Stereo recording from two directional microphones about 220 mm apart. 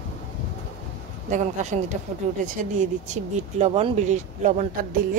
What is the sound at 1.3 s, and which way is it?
Speech, 30° right (ahead or behind).